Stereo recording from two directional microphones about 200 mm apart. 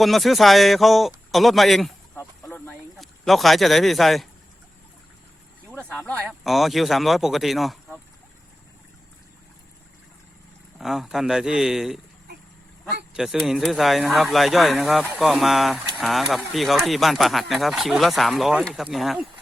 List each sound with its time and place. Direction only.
0.0 s speech: centre (ahead or behind)
2.1 s music: 10° left (ahead or behind)
3.0 s speech: centre (ahead or behind)
6.2 s speech: centre (ahead or behind)
10.8 s speech: centre (ahead or behind)
13.1 s speech: centre (ahead or behind)